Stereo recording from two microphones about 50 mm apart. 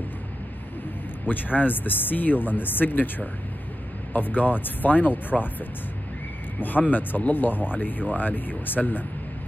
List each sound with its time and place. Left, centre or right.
1.2 s speech: left
6.6 s speech: left